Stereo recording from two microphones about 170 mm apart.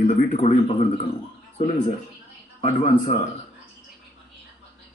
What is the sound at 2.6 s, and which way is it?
Speech, 40° left (ahead or behind).